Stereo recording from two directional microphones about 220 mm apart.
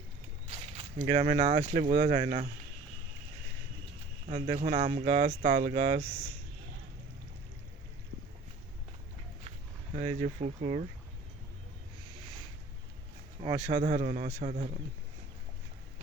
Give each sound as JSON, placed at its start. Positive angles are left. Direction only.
{"t": 0.5, "sound": "speech", "side_deg": -30}
{"t": 4.3, "sound": "speech", "side_deg": -30}
{"t": 9.9, "sound": "speech", "side_deg": -35}
{"t": 13.7, "sound": "speech", "side_deg": -30}